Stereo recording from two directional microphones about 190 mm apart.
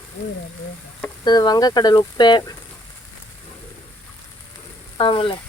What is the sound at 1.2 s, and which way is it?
Speech, 20° left (ahead or behind).